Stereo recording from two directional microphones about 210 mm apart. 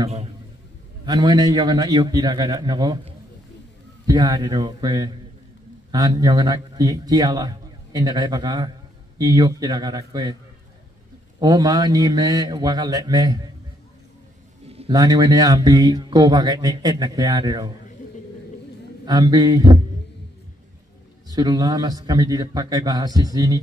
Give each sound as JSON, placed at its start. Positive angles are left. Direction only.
{"t": 1.0, "sound": "a man's voice", "side_deg": -20}
{"t": 11.3, "sound": "a man's voice", "side_deg": -15}
{"t": 14.9, "sound": "speech", "side_deg": -15}
{"t": 19.0, "sound": "a man's voice", "side_deg": -20}
{"t": 21.3, "sound": "speech", "side_deg": -20}